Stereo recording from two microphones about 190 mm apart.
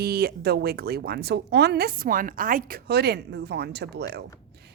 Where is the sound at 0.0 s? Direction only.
55° right (ahead or behind).